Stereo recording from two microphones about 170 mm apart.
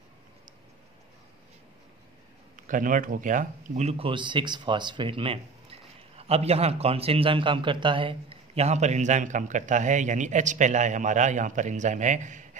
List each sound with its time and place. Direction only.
2.5 s speech: 50° right (ahead or behind)
4.1 s speech: 25° right (ahead or behind); by 12.4 s 45° right (ahead or behind)